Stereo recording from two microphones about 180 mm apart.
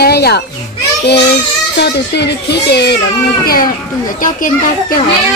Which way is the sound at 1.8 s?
65° left (ahead or behind).